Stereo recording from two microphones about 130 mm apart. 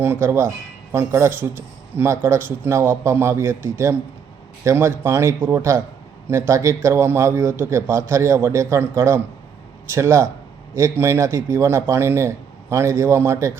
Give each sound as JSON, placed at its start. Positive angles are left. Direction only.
{"t": 0.0, "sound": "a man's voice", "side_deg": -20}